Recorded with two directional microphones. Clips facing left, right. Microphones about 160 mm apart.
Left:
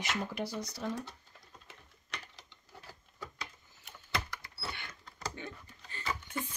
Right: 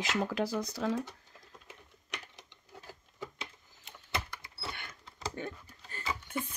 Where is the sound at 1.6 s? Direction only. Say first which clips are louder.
Right 3 dB; 15° right (ahead or behind).